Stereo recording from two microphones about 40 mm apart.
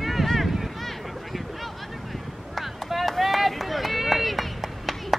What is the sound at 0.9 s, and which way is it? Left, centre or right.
Boat, centre.